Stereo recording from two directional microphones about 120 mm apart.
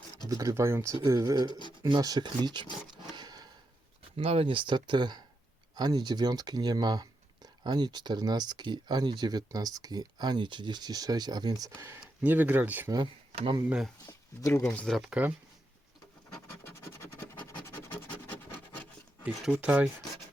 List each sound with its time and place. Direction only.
0.3 s speech: 30° right (ahead or behind)
1.5 s speech: 40° left (ahead or behind)
1.9 s speech: 35° right (ahead or behind)
3.1 s a sound: 35° right (ahead or behind)
4.2 s speech: 55° right (ahead or behind); by 11.9 s 30° right (ahead or behind)
12.2 s speech: 15° right (ahead or behind)
13.3 s speech: 50° right (ahead or behind)
13.7 s speech: 5° right (ahead or behind)
14.1 s speech: 20° left (ahead or behind)
14.7 s speech: 5° left (ahead or behind)
16.6 s scratch: 20° left (ahead or behind)
19.2 s speech: 10° right (ahead or behind)